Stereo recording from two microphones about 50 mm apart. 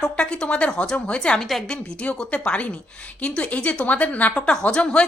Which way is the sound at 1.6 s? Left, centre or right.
Left.